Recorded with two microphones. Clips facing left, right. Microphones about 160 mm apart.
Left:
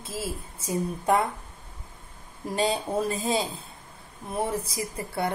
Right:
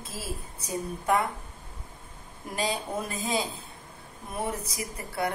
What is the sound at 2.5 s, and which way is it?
A woman's voice, 30° left (ahead or behind).